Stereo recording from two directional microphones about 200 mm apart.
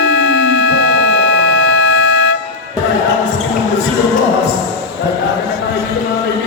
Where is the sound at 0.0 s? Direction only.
65° left (ahead or behind).